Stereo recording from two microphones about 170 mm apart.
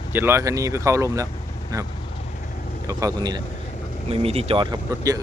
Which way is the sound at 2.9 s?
20° right (ahead or behind).